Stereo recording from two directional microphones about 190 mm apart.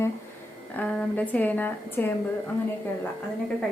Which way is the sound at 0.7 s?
10° left (ahead or behind).